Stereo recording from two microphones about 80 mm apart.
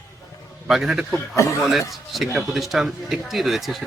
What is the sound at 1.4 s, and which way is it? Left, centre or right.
Speech, left.